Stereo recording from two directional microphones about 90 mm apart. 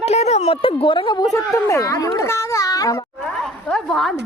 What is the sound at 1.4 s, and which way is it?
A child's voice, 40° left (ahead or behind).